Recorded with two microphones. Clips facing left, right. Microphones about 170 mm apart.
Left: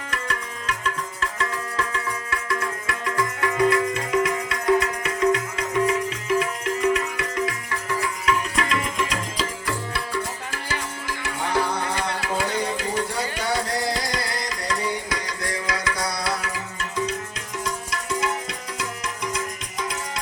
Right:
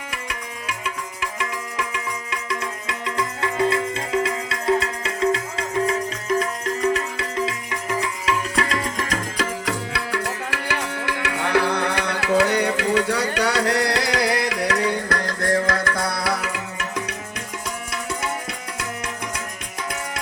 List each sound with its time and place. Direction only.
0.1 s music: 10° right (ahead or behind); by 8.8 s 30° right (ahead or behind)
9.6 s tabla: 75° right (ahead or behind)
19.0 s music: 60° right (ahead or behind)